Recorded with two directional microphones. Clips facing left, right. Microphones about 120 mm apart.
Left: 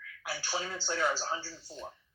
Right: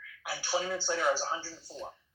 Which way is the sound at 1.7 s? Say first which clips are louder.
Right 2 dB; 35° right (ahead or behind).